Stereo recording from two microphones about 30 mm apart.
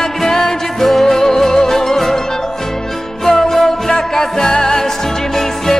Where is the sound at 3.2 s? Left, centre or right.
Centre.